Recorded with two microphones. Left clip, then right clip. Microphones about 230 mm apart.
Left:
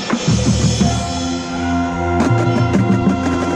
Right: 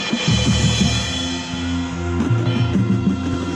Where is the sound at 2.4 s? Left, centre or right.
Centre.